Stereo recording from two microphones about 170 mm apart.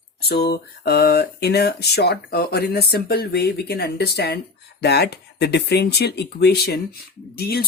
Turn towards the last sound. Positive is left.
turn(degrees=65)  # may be behind; listen again after turning